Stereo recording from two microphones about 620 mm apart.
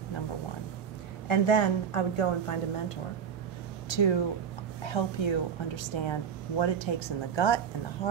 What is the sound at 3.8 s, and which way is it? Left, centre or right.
A woman's voice, left.